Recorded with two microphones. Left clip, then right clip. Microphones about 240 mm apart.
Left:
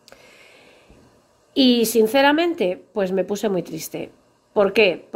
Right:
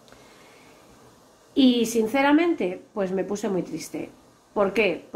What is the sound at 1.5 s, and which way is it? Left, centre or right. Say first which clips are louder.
Speech: left 4 dB; left.